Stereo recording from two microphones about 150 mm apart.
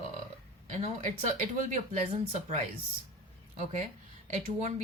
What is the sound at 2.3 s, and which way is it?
Speech, 50° right (ahead or behind).